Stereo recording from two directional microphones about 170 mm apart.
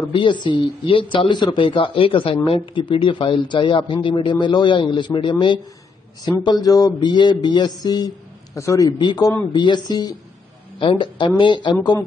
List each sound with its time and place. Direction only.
0.1 s speech: 30° left (ahead or behind)